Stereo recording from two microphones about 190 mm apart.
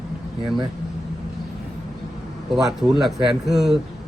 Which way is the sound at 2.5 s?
Centre (ahead or behind).